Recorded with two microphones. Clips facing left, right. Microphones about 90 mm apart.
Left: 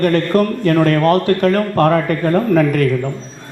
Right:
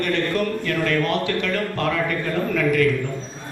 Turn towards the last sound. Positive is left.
turn(degrees=45)  # may be behind; listen again after turning